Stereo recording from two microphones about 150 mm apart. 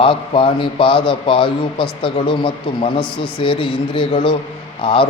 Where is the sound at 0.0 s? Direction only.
35° left (ahead or behind).